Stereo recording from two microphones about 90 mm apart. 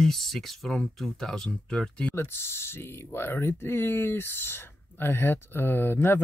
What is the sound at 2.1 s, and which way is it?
Speech, 25° left (ahead or behind).